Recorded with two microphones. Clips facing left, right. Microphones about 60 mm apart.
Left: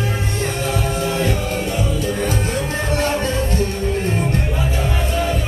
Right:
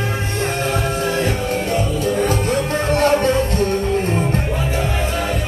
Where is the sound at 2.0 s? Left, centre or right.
Right.